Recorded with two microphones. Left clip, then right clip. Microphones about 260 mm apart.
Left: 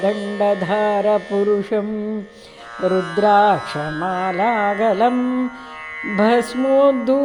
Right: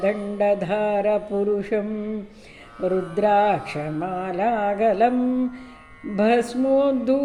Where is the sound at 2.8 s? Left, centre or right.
Left.